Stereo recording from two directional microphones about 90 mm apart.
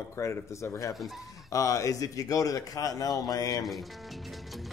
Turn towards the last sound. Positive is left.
turn(degrees=45)  # may be behind; listen again after turning